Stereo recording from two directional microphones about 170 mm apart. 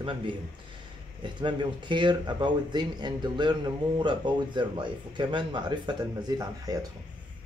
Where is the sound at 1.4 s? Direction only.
25° right (ahead or behind).